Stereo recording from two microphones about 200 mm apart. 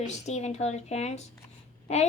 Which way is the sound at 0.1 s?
35° left (ahead or behind).